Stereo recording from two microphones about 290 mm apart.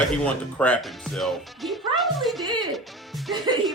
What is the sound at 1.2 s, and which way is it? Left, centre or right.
Music, centre.